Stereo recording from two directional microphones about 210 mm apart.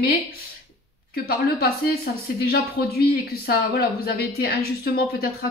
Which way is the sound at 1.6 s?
45° left (ahead or behind).